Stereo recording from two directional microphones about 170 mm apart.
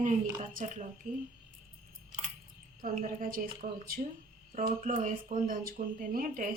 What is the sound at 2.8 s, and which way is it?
Speech, 50° right (ahead or behind).